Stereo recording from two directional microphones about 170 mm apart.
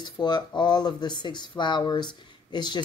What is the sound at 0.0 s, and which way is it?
Speech, 25° left (ahead or behind).